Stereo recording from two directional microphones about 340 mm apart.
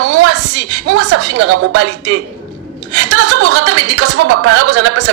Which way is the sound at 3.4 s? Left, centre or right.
Right.